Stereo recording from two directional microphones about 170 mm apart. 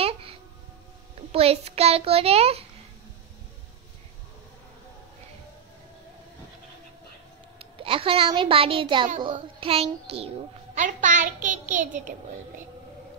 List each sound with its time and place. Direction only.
0.0 s a sound: 35° right (ahead or behind)
1.3 s a child's voice: 35° right (ahead or behind)
7.5 s a child's voice: 30° right (ahead or behind); by 12.1 s 50° right (ahead or behind)